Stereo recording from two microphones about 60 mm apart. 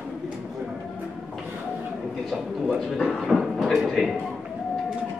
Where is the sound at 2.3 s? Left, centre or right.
Centre.